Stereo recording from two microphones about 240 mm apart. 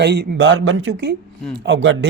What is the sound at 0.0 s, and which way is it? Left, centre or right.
A man's voice, right.